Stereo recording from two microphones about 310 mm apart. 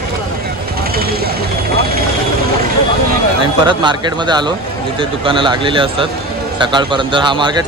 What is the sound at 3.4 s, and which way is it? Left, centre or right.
A man's voice, centre.